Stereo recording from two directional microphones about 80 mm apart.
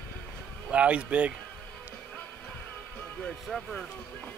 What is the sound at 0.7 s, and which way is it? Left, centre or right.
Speech, centre.